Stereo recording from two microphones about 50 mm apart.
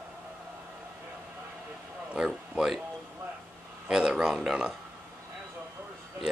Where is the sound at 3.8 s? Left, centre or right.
Centre.